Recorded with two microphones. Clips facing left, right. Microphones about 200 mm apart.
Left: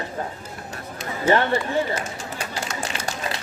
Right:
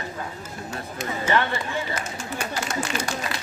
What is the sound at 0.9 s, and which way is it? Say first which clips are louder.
A woman's voice: left 4 dB; 35° left (ahead or behind).